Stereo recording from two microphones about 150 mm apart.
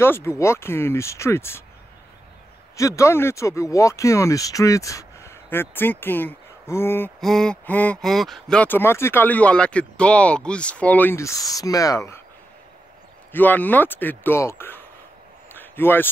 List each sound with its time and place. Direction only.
0.0 s speech: 15° left (ahead or behind)
2.7 s speech: 20° left (ahead or behind)
7.2 s speech: centre (ahead or behind); by 12.2 s 20° left (ahead or behind)
13.3 s speech: 10° left (ahead or behind)
15.5 s a sound: 15° left (ahead or behind)